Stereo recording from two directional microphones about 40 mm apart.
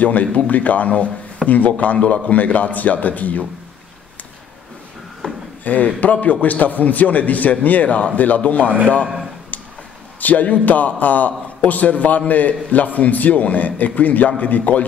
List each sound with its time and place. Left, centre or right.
0.0 s a man's voice: left
5.2 s a sound: left
5.6 s a man's voice: left
10.2 s a man's voice: left